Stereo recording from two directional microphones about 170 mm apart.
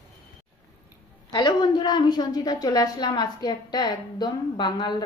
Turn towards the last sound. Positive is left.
turn(degrees=25)  # may be behind; listen again after turning